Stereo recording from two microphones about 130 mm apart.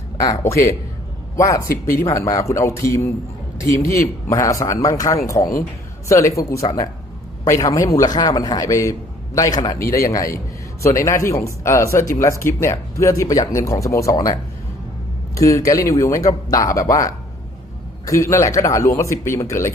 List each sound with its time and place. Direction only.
0.2 s speech: 25° left (ahead or behind)
15.4 s speech: 25° left (ahead or behind)